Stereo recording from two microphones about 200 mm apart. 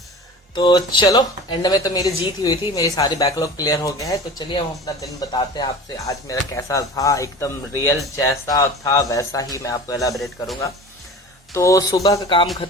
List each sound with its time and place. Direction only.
0.5 s speech: 20° left (ahead or behind)
10.2 s a man's voice: centre (ahead or behind)
11.5 s speech: 15° left (ahead or behind)